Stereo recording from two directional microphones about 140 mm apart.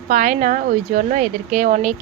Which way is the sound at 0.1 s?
60° right (ahead or behind).